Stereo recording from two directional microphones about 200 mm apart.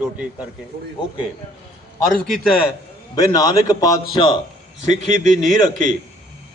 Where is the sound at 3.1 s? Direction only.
20° left (ahead or behind).